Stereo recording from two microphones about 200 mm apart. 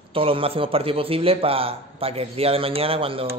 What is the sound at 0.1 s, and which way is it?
A man's voice, 30° right (ahead or behind).